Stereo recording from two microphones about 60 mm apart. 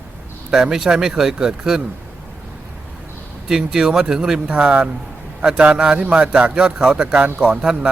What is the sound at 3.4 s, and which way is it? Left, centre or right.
Speech, centre.